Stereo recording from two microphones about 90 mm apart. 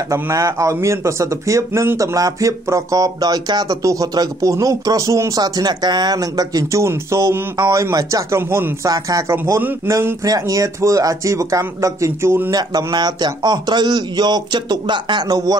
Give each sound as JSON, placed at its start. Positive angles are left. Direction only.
{"t": 0.1, "sound": "speech", "side_deg": -35}
{"t": 5.4, "sound": "speech", "side_deg": -50}
{"t": 8.8, "sound": "speech", "side_deg": -40}
{"t": 9.4, "sound": "a man's voice", "side_deg": -20}
{"t": 9.8, "sound": "speech", "side_deg": -35}
{"t": 12.4, "sound": "speech", "side_deg": -50}